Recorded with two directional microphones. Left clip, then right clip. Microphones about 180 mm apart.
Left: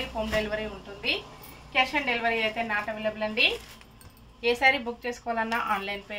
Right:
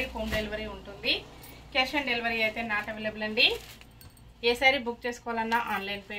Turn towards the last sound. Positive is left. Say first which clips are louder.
# left 1 dB
turn(degrees=15)  # may be behind; listen again after turning